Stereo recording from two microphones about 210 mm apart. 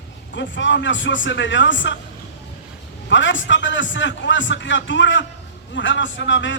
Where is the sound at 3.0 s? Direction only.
60° left (ahead or behind).